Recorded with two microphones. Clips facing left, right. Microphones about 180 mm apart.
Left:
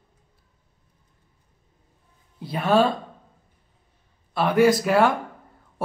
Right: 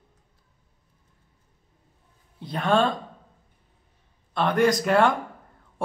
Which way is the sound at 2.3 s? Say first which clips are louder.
Left 3 dB; 5° left (ahead or behind).